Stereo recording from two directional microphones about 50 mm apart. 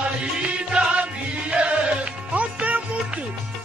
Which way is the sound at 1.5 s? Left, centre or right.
Right.